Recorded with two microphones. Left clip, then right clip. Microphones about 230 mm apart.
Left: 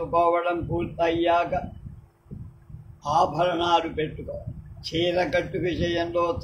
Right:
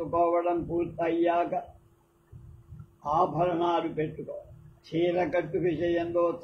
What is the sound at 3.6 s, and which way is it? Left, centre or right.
A man's voice, left.